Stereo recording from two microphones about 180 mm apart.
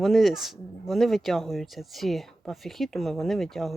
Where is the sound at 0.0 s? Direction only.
Centre (ahead or behind).